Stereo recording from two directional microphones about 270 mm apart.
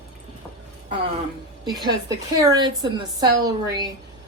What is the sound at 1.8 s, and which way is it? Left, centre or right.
Speech, centre.